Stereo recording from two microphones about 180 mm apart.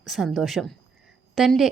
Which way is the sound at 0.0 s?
Centre (ahead or behind).